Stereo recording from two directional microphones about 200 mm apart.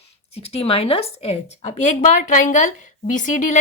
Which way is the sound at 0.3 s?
30° left (ahead or behind).